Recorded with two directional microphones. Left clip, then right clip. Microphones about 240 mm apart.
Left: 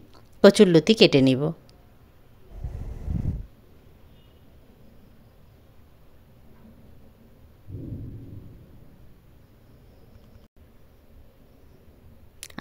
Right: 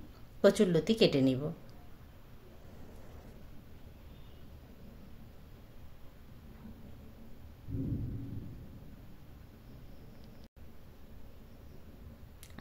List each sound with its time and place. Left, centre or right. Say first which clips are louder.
0.4 s speech: left 11 dB; left
12.4 s chewing: left 16 dB; left